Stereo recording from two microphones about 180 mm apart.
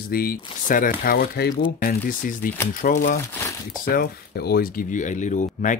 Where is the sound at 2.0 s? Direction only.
50° left (ahead or behind).